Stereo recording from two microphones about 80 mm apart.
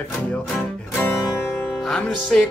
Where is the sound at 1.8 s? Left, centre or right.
Centre.